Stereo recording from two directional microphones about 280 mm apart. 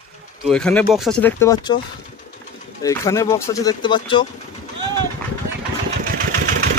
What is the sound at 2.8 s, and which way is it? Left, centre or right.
Speech, centre.